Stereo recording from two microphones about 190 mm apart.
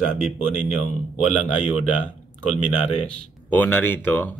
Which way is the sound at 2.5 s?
35° left (ahead or behind).